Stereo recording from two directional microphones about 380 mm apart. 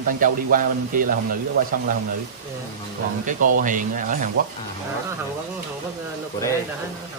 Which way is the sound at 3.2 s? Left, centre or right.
Right.